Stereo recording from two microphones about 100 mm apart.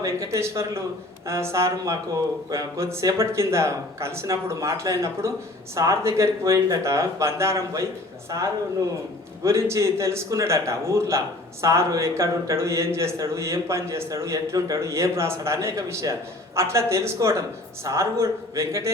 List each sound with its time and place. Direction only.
0.0 s a man's voice: 30° right (ahead or behind)
9.4 s a man's voice: 30° right (ahead or behind)